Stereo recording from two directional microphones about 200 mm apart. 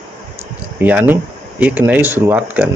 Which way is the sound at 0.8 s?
10° right (ahead or behind).